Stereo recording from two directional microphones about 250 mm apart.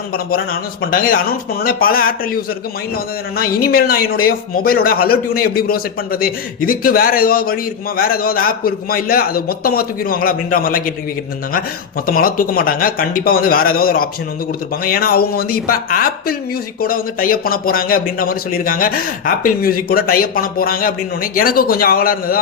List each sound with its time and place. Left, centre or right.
0.1 s a man's voice: left
12.0 s a man's voice: left